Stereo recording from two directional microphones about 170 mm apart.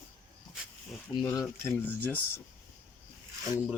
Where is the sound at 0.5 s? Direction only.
Centre (ahead or behind).